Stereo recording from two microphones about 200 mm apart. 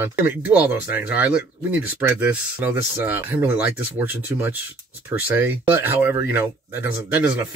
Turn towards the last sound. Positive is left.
turn(degrees=-10)  # may be behind; listen again after turning